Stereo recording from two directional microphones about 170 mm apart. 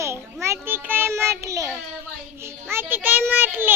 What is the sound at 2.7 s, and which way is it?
A child's voice, 10° right (ahead or behind).